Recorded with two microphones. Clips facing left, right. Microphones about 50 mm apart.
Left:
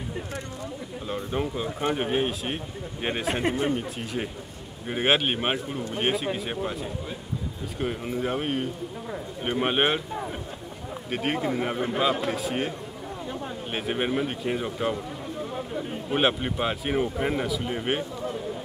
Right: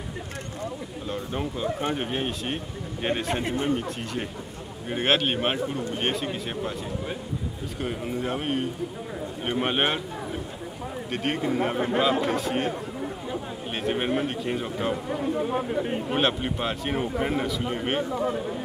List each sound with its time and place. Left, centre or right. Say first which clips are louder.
1.0 s speech: left 2 dB; centre
7.8 s speech: left 1 dB; centre
13.7 s speech: right 1 dB; centre
15.5 s speech: right 5 dB; right
16.2 s speech: left 3 dB; centre